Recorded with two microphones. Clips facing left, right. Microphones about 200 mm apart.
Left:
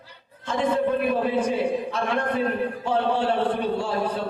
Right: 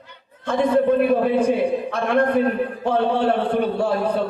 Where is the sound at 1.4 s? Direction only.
60° right (ahead or behind).